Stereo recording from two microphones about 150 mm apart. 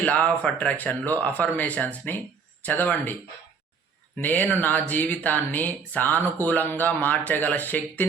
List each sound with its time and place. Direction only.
0.0 s speech: 10° left (ahead or behind)
4.2 s speech: 10° left (ahead or behind)